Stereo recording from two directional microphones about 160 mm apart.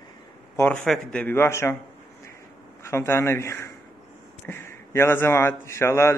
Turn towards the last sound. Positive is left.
turn(degrees=15)  # may be behind; listen again after turning